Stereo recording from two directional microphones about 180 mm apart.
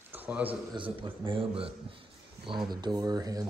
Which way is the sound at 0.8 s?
30° right (ahead or behind).